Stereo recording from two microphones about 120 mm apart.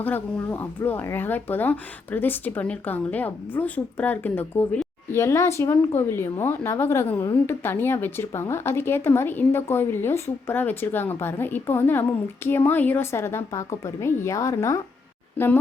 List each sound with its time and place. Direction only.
0.0 s a woman's voice: 15° left (ahead or behind)